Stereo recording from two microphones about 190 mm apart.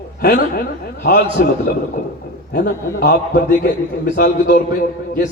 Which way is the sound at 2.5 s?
55° left (ahead or behind).